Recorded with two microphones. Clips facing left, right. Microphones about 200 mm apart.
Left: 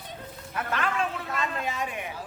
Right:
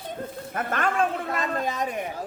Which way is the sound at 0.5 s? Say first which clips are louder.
Right 3 dB; 50° right (ahead or behind).